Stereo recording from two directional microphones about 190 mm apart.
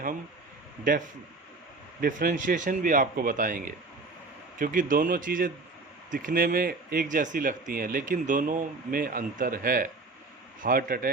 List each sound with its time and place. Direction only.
2.0 s speech: 45° right (ahead or behind)